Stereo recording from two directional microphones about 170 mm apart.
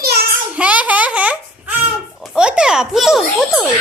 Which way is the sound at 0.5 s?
10° right (ahead or behind).